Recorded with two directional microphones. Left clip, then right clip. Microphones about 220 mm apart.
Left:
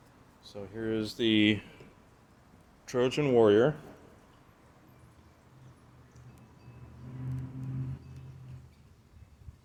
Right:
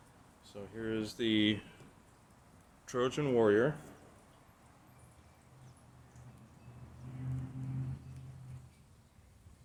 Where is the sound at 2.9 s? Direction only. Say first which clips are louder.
Left 5 dB; 15° left (ahead or behind).